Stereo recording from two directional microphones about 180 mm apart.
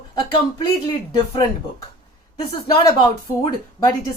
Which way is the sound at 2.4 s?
25° left (ahead or behind).